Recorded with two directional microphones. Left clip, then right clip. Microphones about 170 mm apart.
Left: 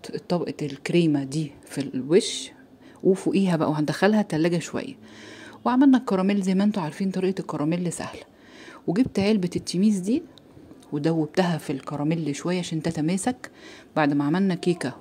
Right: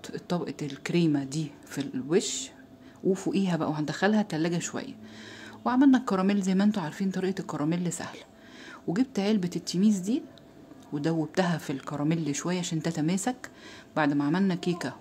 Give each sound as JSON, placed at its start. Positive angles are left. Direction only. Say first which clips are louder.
{"t": 0.0, "sound": "speech", "louder": "left 6 dB", "side_deg": 20}